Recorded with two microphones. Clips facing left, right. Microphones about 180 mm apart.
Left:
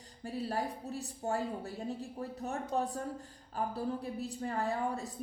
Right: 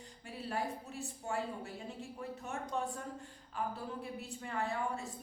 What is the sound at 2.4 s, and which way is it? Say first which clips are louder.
Speech: left 5 dB; 35° left (ahead or behind).